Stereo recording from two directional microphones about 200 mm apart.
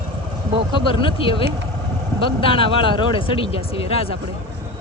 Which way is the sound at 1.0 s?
25° left (ahead or behind).